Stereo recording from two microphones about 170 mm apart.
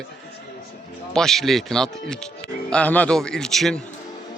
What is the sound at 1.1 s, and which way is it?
Speech, centre (ahead or behind).